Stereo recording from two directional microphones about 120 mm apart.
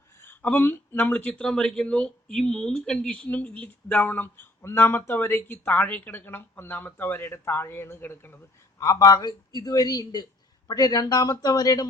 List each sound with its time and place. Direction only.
0.2 s speech: 15° left (ahead or behind)
8.8 s a man's voice: 30° left (ahead or behind)